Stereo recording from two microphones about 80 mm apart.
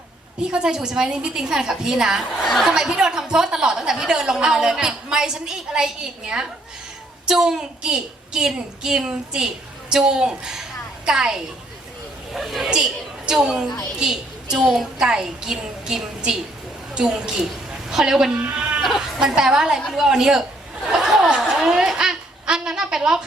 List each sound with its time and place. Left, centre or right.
0.4 s a woman's voice: centre